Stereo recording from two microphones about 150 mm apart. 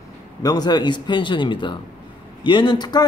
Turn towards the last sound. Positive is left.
turn(degrees=25)  # may be behind; listen again after turning